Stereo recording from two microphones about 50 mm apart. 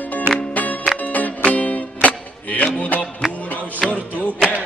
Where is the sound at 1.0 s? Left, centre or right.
Left.